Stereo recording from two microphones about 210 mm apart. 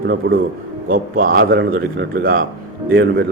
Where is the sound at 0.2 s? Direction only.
50° right (ahead or behind).